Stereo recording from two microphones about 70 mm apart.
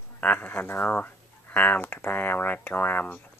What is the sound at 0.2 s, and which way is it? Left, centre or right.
Speech, left.